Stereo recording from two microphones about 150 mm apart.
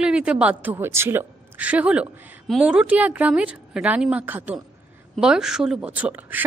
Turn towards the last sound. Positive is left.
turn(degrees=-10)  # may be behind; listen again after turning